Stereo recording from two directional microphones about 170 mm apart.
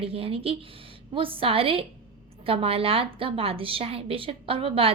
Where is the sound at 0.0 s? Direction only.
35° right (ahead or behind).